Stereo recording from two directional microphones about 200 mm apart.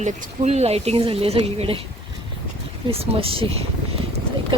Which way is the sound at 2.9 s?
30° right (ahead or behind).